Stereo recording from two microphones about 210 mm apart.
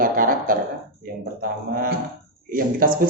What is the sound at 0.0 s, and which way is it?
Speech, 40° right (ahead or behind).